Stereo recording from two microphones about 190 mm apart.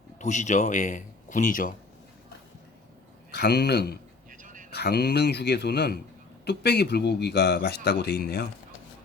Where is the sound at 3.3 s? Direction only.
55° left (ahead or behind).